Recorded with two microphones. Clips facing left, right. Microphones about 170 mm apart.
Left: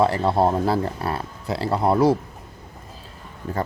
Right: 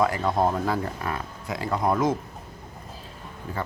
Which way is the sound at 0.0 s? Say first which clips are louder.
Left 4 dB; 30° left (ahead or behind).